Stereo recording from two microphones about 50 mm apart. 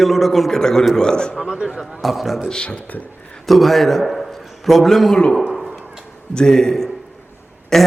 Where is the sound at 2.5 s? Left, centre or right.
Left.